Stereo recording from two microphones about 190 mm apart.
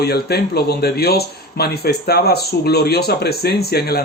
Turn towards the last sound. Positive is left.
turn(degrees=55)  # may be behind; listen again after turning